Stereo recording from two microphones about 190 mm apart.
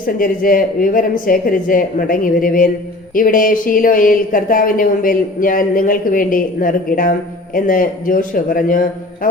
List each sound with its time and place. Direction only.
0.0 s speech: 45° left (ahead or behind)